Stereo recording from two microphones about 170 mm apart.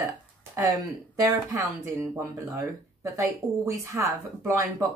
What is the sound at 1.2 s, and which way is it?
Speech, 15° right (ahead or behind).